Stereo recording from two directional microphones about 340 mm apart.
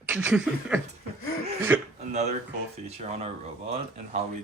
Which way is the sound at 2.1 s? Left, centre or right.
Centre.